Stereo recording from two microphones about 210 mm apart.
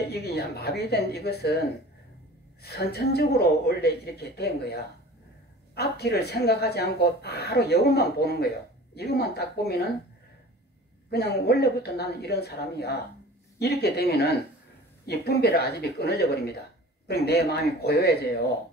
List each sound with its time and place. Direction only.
0.1 s speech: 50° left (ahead or behind)
5.8 s speech: 50° left (ahead or behind)
11.1 s speech: 50° left (ahead or behind)